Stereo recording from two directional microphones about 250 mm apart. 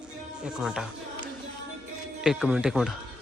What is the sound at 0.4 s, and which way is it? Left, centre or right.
Speech, centre.